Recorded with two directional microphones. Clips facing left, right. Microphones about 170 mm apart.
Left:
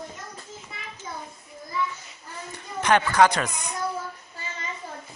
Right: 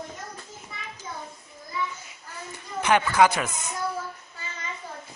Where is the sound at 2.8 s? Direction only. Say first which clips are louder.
Left 1 dB; 10° right (ahead or behind).